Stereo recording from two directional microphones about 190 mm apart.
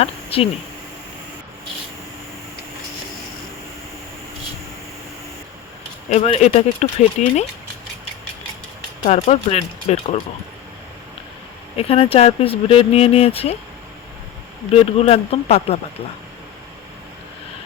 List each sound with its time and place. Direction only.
0.0 s speech: 30° left (ahead or behind)
6.1 s speech: 40° left (ahead or behind)
9.0 s speech: 40° left (ahead or behind)
11.8 s speech: 30° left (ahead or behind)
14.9 s speech: 30° left (ahead or behind)